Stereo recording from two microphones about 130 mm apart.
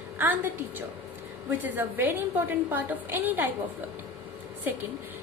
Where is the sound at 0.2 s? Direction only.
15° right (ahead or behind).